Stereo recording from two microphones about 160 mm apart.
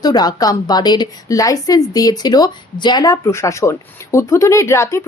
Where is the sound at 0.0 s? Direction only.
25° left (ahead or behind).